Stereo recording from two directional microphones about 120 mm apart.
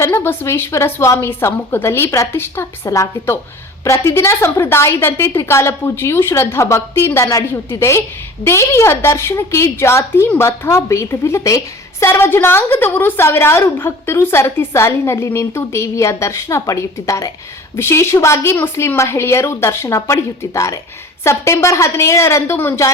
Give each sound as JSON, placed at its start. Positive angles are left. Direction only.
{"t": 0.0, "sound": "a woman's voice", "side_deg": 20}